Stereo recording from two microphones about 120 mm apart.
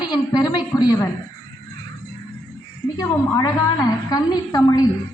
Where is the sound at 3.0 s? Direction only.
30° left (ahead or behind).